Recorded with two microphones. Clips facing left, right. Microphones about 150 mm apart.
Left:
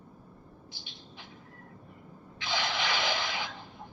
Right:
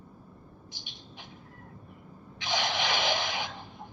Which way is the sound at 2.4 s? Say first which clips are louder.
Right 2 dB; 20° right (ahead or behind).